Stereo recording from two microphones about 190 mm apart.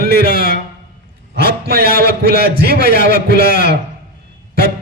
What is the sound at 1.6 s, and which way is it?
A man's voice, 55° right (ahead or behind).